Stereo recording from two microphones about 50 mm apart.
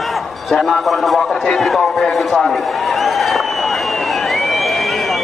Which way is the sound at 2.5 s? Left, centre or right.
Centre.